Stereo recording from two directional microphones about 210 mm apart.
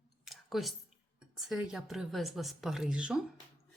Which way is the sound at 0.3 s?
Centre (ahead or behind).